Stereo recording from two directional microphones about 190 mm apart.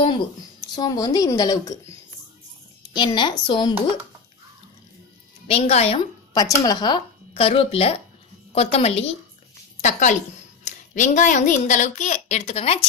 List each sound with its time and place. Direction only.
0.7 s speech: 20° left (ahead or behind)
2.9 s speech: 25° left (ahead or behind)
5.5 s a child's voice: 35° left (ahead or behind)
6.3 s a child's voice: 20° left (ahead or behind)